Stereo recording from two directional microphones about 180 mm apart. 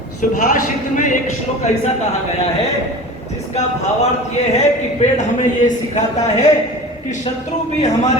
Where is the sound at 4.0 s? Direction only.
40° left (ahead or behind).